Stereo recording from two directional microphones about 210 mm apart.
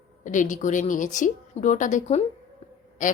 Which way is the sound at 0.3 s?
35° left (ahead or behind).